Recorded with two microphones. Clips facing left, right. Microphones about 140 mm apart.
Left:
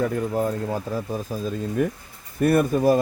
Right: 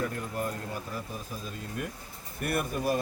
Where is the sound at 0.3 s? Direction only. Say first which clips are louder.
Left 10 dB; 90° left.